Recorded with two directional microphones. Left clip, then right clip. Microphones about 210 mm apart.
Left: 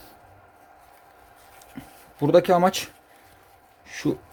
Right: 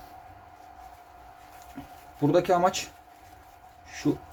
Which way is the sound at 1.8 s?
50° left (ahead or behind).